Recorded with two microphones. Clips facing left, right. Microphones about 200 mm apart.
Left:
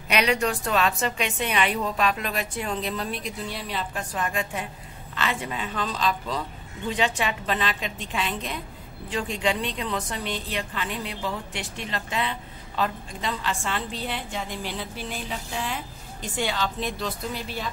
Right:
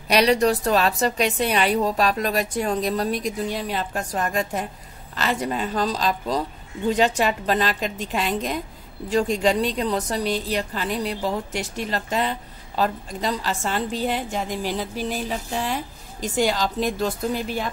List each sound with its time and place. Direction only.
0.1 s a woman's voice: 35° right (ahead or behind)